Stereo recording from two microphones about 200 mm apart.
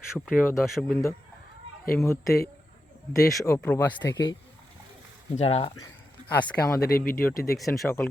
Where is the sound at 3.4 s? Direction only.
10° left (ahead or behind).